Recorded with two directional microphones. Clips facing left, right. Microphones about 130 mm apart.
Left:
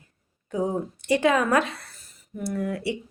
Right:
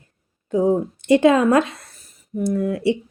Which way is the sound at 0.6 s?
20° right (ahead or behind).